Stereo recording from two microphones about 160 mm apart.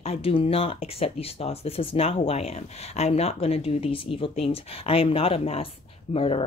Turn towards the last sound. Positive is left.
turn(degrees=35)  # may be behind; listen again after turning